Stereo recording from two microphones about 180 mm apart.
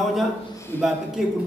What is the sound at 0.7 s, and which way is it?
Speech, 10° left (ahead or behind).